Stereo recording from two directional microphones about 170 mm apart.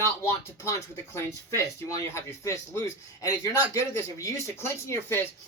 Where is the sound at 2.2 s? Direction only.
15° left (ahead or behind).